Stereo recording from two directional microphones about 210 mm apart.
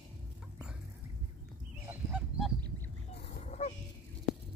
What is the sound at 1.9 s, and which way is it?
Goose, 5° right (ahead or behind).